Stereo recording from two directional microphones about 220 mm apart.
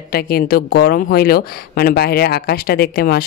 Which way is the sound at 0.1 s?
45° left (ahead or behind).